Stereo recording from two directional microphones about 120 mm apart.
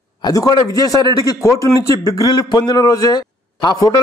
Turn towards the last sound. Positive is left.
turn(degrees=35)  # may be behind; listen again after turning